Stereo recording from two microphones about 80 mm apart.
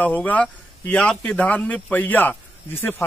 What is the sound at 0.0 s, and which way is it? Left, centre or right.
A man's voice, centre.